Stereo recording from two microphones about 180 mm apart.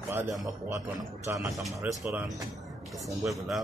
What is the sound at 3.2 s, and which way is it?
Speech, centre (ahead or behind).